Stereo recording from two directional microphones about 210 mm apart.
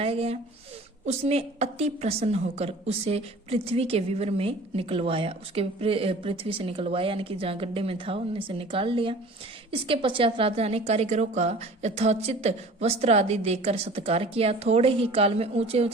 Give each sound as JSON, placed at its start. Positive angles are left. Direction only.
{"t": 0.0, "sound": "a woman's voice", "side_deg": -30}